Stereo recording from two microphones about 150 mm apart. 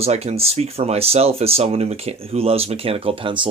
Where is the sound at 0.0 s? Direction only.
45° right (ahead or behind).